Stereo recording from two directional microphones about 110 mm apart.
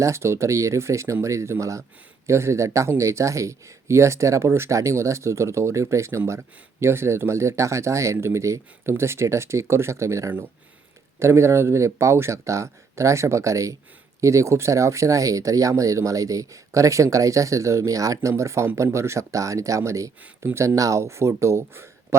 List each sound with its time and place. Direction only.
0.0 s speech: 25° right (ahead or behind)